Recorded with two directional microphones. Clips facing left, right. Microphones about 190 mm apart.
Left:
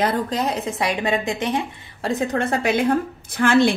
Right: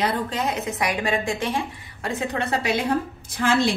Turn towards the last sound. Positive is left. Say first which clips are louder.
# left 5 dB
turn(degrees=55)  # may be behind; listen again after turning